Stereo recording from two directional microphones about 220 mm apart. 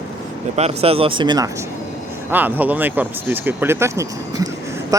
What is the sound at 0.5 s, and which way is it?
Speech, 30° right (ahead or behind).